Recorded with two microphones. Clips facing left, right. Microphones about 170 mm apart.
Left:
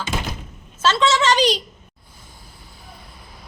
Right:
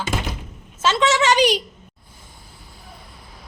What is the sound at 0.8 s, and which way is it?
Speech, 15° right (ahead or behind).